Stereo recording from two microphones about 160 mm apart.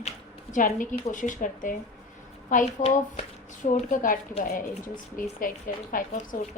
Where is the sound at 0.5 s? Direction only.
55° left (ahead or behind).